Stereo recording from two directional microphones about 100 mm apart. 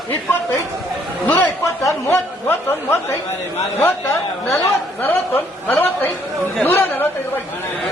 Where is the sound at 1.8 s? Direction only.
25° left (ahead or behind).